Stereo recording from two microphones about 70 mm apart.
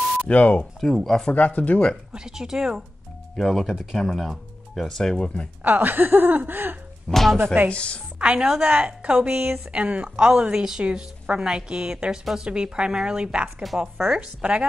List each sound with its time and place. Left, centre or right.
0.3 s speech: left
0.7 s speech: centre
1.3 s speech: left
2.1 s a woman's voice: centre
3.3 s speech: centre
5.6 s speech: right
7.1 s speech: centre
7.7 s speech: centre
8.2 s a woman's voice: centre
13.6 s a woman's voice: centre